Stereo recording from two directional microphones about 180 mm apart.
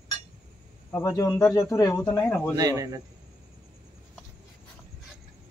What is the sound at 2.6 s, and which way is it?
Speech, 20° right (ahead or behind).